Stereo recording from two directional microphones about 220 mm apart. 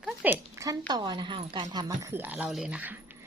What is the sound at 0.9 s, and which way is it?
A woman's voice, 20° right (ahead or behind).